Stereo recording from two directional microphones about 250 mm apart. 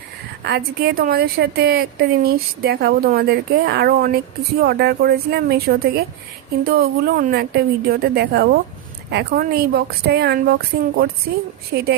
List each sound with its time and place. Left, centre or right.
0.4 s a woman's voice: right